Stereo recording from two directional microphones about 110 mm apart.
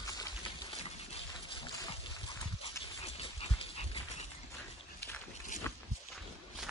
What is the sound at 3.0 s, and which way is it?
Dog, 60° left (ahead or behind).